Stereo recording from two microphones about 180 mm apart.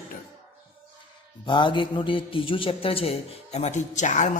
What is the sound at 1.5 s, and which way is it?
A man's voice, 25° left (ahead or behind).